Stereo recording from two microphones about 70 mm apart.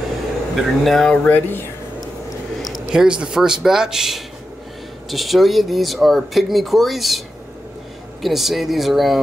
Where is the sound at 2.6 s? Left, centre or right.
Centre.